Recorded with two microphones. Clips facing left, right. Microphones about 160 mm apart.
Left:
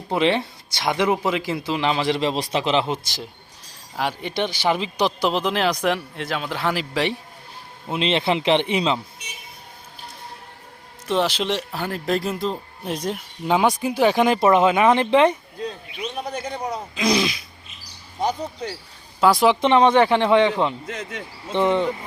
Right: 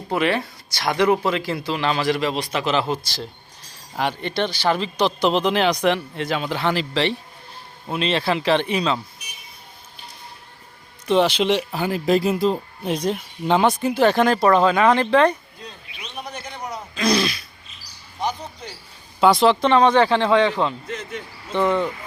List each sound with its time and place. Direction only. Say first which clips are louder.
0.1 s speech: left 1 dB; 25° left (ahead or behind)
3.9 s speech: right 1 dB; 5° left (ahead or behind)
7.9 s speech: left 1 dB; 20° left (ahead or behind)
11.1 s speech: right 4 dB; centre (ahead or behind); by 15.4 s 20° left (ahead or behind)
16.9 s speech: right 1 dB; 15° left (ahead or behind)
18.2 s speech: left 3 dB; 40° left (ahead or behind)
19.2 s speech: right 1 dB; 10° left (ahead or behind)
20.8 s speech: right 1 dB; 90° left
21.5 s speech: even; 20° left (ahead or behind)